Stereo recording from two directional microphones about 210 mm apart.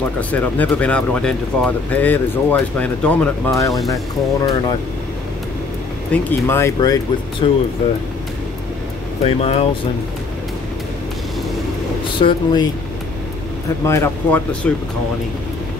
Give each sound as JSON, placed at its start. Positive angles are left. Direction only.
{"t": 0.2, "sound": "speech", "side_deg": 10}
{"t": 6.1, "sound": "speech", "side_deg": 5}
{"t": 7.4, "sound": "speech", "side_deg": 25}
{"t": 9.2, "sound": "speech", "side_deg": 30}
{"t": 12.2, "sound": "speech", "side_deg": 25}
{"t": 13.8, "sound": "speech", "side_deg": 10}